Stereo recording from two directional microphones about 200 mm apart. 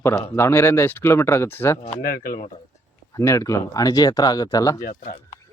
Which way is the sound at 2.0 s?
45° left (ahead or behind).